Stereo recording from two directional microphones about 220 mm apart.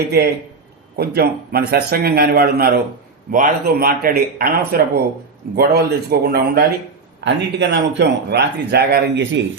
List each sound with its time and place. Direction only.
0.1 s speech: 45° right (ahead or behind)